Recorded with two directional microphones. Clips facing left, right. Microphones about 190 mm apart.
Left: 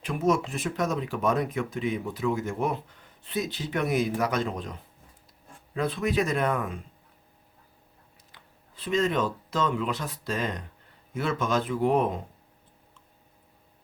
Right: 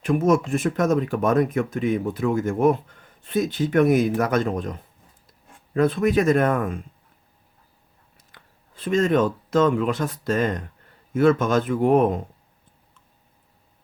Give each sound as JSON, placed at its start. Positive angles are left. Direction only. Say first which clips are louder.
{"t": 0.0, "sound": "speech", "louder": "right 6 dB", "side_deg": -50}
{"t": 8.3, "sound": "speech", "louder": "right 4 dB", "side_deg": -50}